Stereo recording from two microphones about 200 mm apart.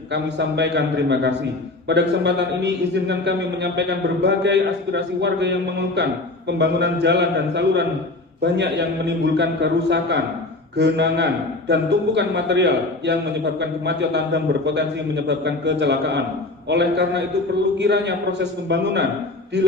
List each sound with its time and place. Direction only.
0.1 s a man's voice: 60° right (ahead or behind)